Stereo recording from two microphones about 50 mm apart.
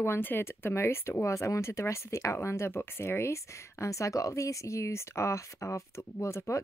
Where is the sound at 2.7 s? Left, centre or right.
Left.